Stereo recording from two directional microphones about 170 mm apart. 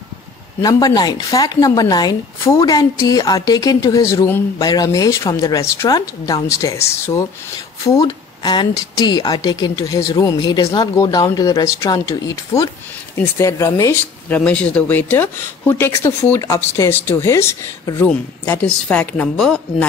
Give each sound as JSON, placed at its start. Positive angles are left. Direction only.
{"t": 0.6, "sound": "speech", "side_deg": 20}